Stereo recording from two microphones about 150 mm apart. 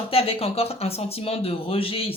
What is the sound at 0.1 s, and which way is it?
Speech, 40° left (ahead or behind).